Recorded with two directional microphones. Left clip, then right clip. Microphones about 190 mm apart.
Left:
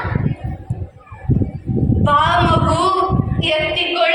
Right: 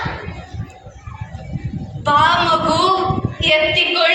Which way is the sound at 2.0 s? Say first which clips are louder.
Right 1 dB; 35° right (ahead or behind).